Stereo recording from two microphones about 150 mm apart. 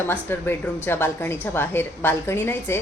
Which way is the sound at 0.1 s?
15° left (ahead or behind).